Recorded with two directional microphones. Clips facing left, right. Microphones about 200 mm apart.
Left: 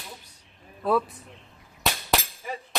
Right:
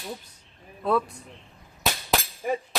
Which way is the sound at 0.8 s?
Centre (ahead or behind).